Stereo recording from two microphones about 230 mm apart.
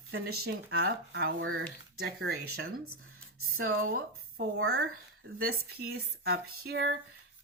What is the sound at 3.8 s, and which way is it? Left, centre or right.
Speech, right.